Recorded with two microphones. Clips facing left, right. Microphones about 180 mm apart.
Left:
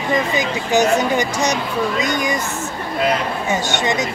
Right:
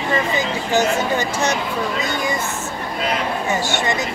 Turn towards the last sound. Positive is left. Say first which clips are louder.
# left 1 dB
turn(degrees=20)  # may be behind; listen again after turning